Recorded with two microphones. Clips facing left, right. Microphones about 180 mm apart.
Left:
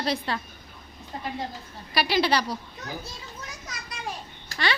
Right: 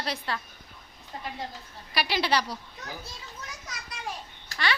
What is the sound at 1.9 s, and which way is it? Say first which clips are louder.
Speech: left 3 dB; 40° left (ahead or behind).